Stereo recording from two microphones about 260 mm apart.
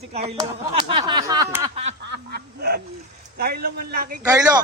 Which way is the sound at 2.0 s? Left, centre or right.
Right.